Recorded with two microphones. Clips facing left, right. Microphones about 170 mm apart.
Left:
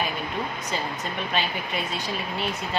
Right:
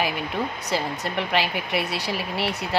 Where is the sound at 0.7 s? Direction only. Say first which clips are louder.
Right 4 dB; 75° right (ahead or behind).